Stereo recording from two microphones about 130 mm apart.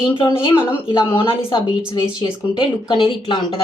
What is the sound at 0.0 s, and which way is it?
A woman's voice, 40° left (ahead or behind).